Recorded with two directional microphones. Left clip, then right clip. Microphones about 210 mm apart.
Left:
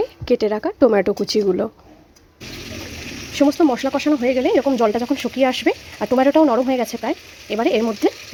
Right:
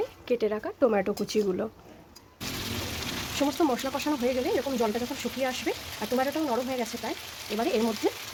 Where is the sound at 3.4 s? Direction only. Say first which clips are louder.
Left 11 dB; 25° left (ahead or behind).